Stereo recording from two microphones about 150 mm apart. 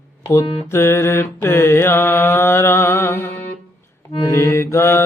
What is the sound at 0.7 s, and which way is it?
Mantra, 15° left (ahead or behind).